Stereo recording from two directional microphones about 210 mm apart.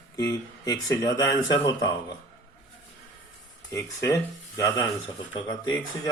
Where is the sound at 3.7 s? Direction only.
15° left (ahead or behind).